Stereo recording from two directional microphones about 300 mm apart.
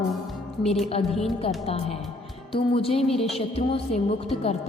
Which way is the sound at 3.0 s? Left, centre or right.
Centre.